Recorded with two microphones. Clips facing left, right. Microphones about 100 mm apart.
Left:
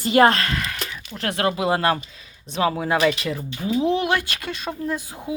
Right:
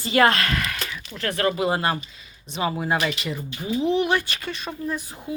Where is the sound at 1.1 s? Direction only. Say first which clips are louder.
Left 1 dB; 70° left (ahead or behind).